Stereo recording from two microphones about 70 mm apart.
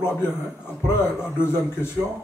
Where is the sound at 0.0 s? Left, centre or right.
Left.